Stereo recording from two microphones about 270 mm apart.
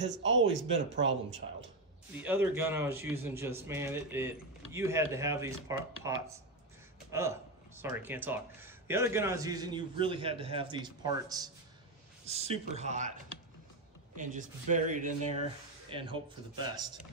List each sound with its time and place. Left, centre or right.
0.1 s speech: right
1.4 s speech: right
2.1 s speech: centre; by 13.1 s right
14.1 s speech: right